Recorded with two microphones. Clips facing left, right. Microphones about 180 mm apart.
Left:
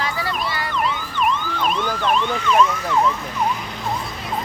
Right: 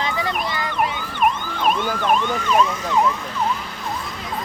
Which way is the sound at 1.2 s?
50° right (ahead or behind).